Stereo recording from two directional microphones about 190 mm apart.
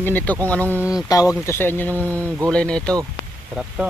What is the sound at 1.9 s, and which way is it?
Speech, 15° right (ahead or behind).